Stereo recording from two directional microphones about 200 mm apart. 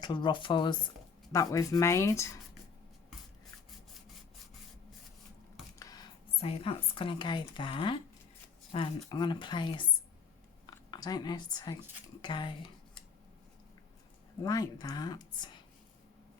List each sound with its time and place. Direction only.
0.0 s speech: 25° left (ahead or behind)
5.8 s speech: 20° left (ahead or behind)
14.4 s speech: 20° left (ahead or behind)